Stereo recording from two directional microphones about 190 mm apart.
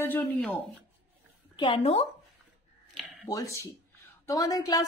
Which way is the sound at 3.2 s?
15° left (ahead or behind).